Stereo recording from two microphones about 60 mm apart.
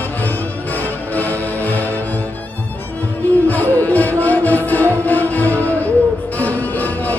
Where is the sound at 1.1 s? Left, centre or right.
Left.